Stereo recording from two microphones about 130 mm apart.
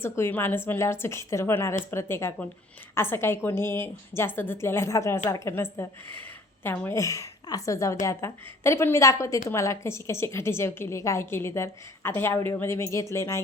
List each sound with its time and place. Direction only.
0.0 s a woman's voice: 15° left (ahead or behind)